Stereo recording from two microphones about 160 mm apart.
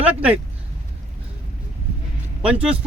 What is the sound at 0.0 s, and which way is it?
Speech, 10° right (ahead or behind).